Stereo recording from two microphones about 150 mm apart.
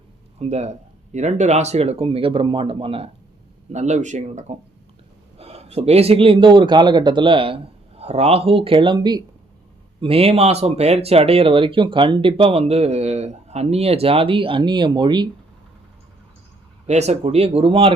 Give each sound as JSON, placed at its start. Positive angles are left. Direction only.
{"t": 0.3, "sound": "speech", "side_deg": -45}
{"t": 3.7, "sound": "speech", "side_deg": -50}
{"t": 16.8, "sound": "speech", "side_deg": -45}